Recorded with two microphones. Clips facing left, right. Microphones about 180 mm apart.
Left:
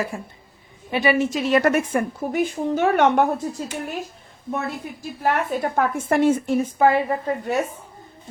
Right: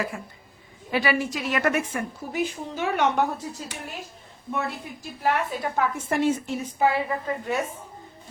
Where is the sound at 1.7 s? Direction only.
50° left (ahead or behind).